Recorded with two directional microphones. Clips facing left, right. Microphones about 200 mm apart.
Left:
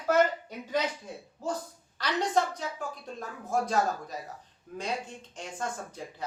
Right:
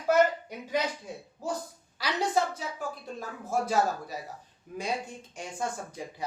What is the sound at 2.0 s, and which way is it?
A woman's voice, 5° right (ahead or behind).